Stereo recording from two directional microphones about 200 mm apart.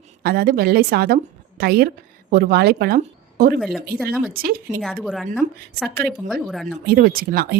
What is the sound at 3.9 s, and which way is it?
Speech, centre (ahead or behind).